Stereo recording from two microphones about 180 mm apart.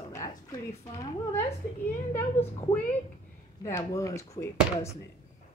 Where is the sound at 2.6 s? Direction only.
10° left (ahead or behind).